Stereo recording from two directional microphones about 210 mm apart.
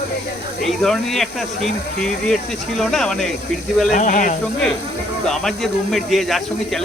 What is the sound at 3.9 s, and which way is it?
Speech, 35° left (ahead or behind).